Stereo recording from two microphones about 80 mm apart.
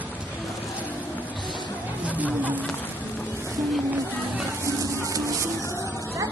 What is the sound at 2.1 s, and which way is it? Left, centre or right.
Speech, centre.